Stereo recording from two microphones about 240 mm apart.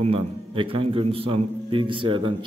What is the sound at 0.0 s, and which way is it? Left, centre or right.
A man's voice, right.